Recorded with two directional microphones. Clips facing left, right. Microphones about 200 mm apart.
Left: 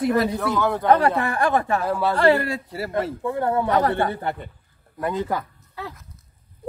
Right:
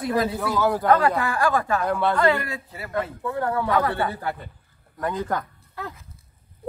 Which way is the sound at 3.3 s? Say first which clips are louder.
Left 2 dB; 20° left (ahead or behind).